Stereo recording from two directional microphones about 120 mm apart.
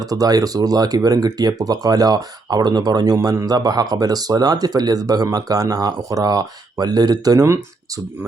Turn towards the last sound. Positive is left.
turn(degrees=-25)  # may be behind; listen again after turning